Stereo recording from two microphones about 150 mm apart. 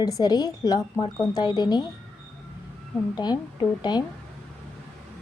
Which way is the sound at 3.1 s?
30° left (ahead or behind).